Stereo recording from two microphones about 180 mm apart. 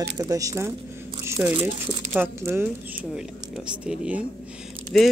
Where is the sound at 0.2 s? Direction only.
20° right (ahead or behind).